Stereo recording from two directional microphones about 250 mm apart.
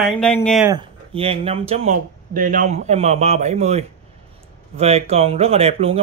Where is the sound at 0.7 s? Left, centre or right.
Centre.